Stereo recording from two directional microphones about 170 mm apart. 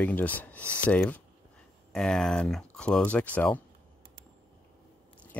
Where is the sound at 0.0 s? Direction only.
10° left (ahead or behind).